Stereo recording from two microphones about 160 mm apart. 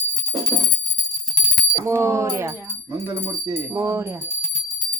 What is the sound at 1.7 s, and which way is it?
Speech, 15° right (ahead or behind).